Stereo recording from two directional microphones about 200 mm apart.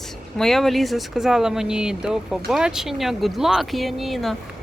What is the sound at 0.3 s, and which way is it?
Speech, centre (ahead or behind).